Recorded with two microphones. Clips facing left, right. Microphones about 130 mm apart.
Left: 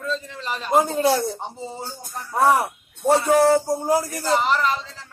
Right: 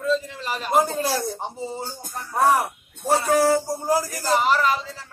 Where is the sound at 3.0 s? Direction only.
20° left (ahead or behind).